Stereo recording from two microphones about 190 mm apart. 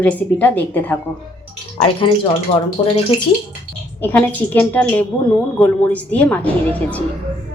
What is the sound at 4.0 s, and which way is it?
A woman's voice, 10° left (ahead or behind).